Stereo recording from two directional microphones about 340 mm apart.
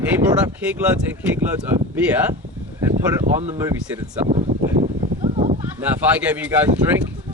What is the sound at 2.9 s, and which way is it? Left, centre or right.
Speech, right.